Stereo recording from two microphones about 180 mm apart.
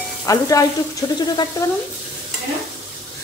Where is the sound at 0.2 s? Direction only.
20° left (ahead or behind).